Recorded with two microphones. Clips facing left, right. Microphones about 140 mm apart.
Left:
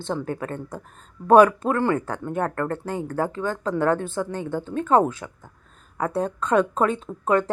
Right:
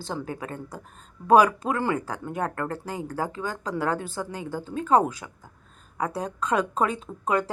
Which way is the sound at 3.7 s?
10° right (ahead or behind).